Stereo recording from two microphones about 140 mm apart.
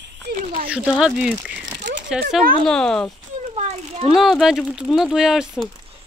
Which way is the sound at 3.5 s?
45° right (ahead or behind).